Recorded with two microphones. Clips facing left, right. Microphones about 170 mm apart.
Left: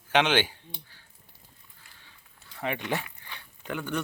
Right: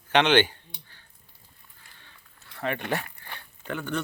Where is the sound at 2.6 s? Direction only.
15° left (ahead or behind).